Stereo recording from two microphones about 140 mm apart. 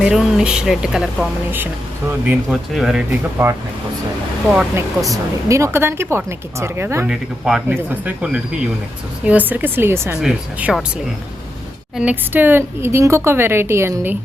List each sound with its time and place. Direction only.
0.0 s speech: 5° right (ahead or behind)
1.5 s a woman's voice: 15° right (ahead or behind)
3.4 s speech: 25° right (ahead or behind)
5.0 s speech: 20° right (ahead or behind)
7.1 s a woman's voice: 5° right (ahead or behind)
10.2 s speech: 5° right (ahead or behind)
11.9 s a woman's voice: 10° right (ahead or behind)